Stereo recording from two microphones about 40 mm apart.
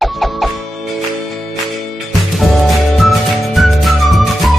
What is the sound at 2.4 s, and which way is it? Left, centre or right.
Music, centre.